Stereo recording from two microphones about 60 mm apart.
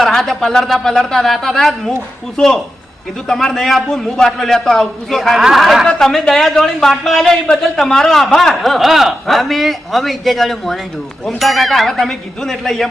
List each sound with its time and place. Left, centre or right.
0.0 s a man's voice: centre